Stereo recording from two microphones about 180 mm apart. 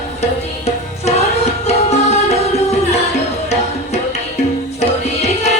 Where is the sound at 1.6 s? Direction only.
35° left (ahead or behind).